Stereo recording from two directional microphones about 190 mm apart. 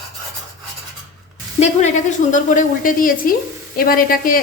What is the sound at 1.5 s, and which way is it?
A woman's voice, 40° left (ahead or behind).